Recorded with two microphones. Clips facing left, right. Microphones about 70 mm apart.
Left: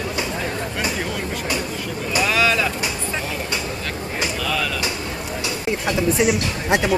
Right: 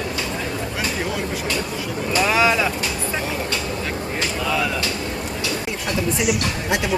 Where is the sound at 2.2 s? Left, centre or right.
Right.